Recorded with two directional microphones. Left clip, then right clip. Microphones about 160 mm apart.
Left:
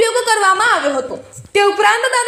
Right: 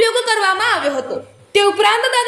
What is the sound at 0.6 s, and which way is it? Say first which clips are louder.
Speech: left 3 dB; 15° left (ahead or behind).